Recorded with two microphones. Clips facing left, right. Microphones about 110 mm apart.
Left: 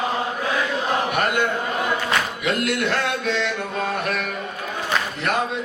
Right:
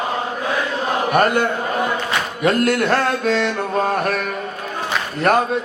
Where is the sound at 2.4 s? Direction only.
45° right (ahead or behind).